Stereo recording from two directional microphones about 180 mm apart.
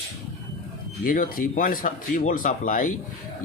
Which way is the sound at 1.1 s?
50° left (ahead or behind).